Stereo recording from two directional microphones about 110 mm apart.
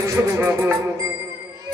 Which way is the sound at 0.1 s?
25° right (ahead or behind).